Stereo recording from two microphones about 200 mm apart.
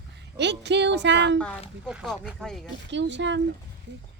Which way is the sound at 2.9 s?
60° right (ahead or behind).